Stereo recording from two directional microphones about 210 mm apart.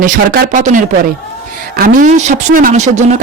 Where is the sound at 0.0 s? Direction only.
35° right (ahead or behind).